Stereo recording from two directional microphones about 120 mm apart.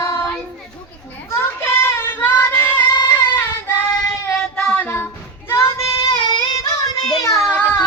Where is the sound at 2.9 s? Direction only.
35° left (ahead or behind).